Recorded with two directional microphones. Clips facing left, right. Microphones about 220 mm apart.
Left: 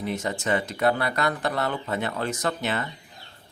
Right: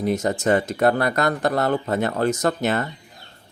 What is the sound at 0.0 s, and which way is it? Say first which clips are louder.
Speech: right 7 dB; 40° right (ahead or behind).